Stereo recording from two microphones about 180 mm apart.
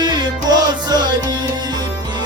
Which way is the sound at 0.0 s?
25° right (ahead or behind).